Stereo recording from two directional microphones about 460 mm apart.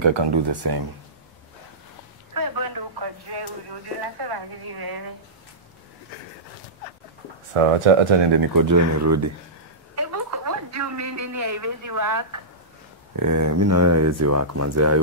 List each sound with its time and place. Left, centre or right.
0.0 s speech: right
2.3 s a sound: right
7.5 s speech: right
8.4 s speech: right
9.9 s a sound: right
13.1 s speech: right